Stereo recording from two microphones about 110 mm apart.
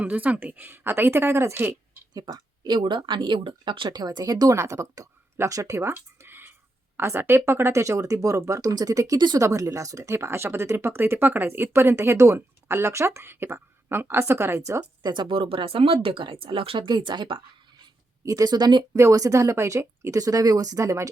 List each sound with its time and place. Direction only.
0.0 s speech: 15° right (ahead or behind)
2.1 s speech: 40° right (ahead or behind)
15.1 s speech: 50° right (ahead or behind); by 21.1 s 30° right (ahead or behind)